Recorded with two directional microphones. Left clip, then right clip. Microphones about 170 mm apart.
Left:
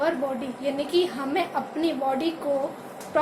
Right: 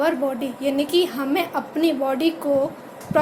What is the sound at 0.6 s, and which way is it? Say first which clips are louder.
A woman's voice: right 4 dB; 50° right (ahead or behind).